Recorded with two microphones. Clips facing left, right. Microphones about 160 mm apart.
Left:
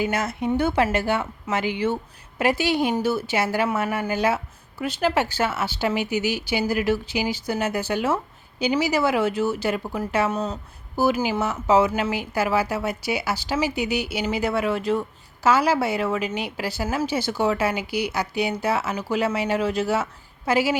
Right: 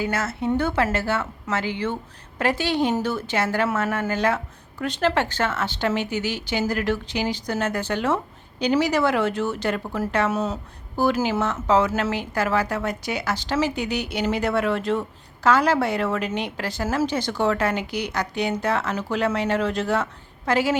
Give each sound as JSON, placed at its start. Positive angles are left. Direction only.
{"t": 0.0, "sound": "speech", "side_deg": 15}
{"t": 10.3, "sound": "speech", "side_deg": -5}
{"t": 10.9, "sound": "a woman's voice", "side_deg": 5}